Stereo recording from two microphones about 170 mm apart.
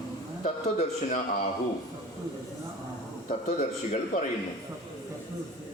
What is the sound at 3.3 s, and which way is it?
Speech, 45° left (ahead or behind).